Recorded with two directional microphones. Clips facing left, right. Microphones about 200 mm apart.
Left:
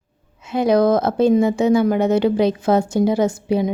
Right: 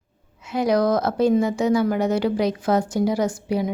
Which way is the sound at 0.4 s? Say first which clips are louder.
Left 4 dB; 25° left (ahead or behind).